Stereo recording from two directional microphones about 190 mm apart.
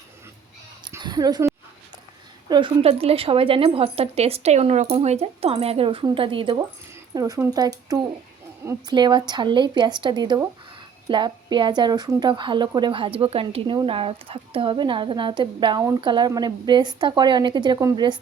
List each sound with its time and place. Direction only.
0.9 s a woman's voice: 20° right (ahead or behind)
2.5 s a woman's voice: 25° right (ahead or behind)